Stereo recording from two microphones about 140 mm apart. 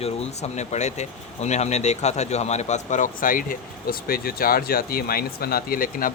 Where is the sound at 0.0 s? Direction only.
50° left (ahead or behind).